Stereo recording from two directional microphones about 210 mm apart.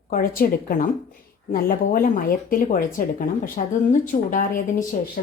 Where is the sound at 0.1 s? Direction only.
45° left (ahead or behind).